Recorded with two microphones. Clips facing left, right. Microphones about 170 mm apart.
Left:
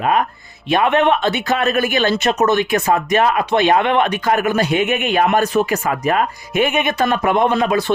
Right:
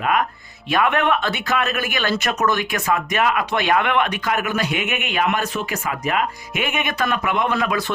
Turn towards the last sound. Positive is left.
turn(degrees=30)  # may be behind; listen again after turning